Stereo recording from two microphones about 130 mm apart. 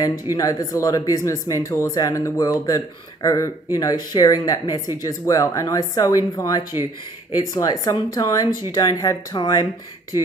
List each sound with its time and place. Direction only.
0.0 s speech: 30° left (ahead or behind)